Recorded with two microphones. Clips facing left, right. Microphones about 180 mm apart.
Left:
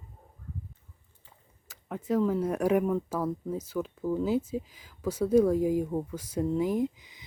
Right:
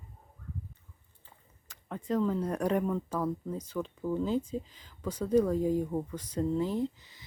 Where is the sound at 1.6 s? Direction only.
5° left (ahead or behind).